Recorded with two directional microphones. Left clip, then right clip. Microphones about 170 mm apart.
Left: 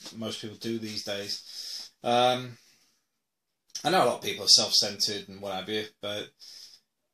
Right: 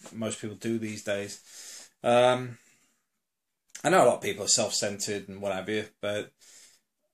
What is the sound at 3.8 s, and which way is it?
Speech, 50° right (ahead or behind).